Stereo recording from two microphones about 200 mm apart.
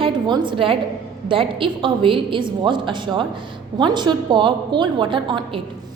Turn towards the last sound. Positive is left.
turn(degrees=-25)  # may be behind; listen again after turning